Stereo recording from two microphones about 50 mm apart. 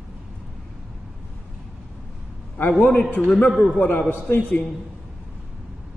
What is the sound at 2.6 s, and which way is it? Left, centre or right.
Speech, left.